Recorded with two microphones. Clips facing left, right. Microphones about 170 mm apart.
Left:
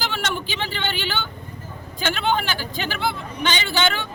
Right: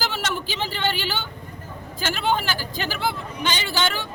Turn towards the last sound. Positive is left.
turn(degrees=-5)  # may be behind; listen again after turning